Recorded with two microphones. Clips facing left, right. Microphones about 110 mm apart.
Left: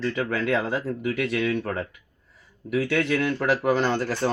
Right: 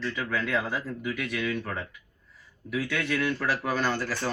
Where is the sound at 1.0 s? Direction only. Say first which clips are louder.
Left 7 dB; 80° left.